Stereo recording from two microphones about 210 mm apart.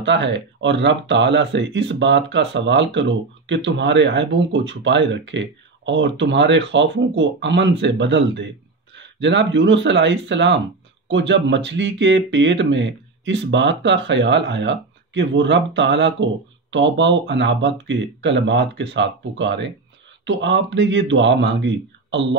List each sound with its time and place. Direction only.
0.0 s speech: 60° right (ahead or behind)